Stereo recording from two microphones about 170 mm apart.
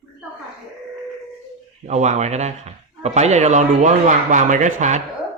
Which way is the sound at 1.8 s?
45° right (ahead or behind).